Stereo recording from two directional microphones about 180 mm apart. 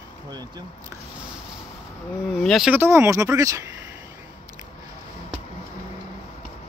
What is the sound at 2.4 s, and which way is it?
Speech, centre (ahead or behind).